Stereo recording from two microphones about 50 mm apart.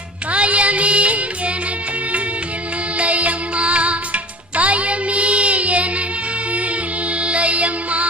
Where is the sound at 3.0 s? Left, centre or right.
Right.